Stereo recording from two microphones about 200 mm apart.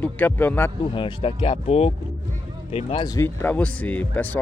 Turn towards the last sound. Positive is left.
turn(degrees=10)  # may be behind; listen again after turning